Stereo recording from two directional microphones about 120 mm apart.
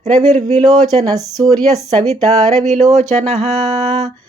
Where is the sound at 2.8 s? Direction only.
65° right (ahead or behind).